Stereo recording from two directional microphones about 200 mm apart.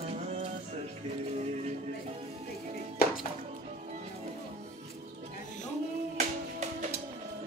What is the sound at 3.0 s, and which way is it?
Music, 50° left (ahead or behind).